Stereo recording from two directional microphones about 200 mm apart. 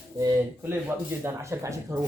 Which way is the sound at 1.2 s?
15° right (ahead or behind).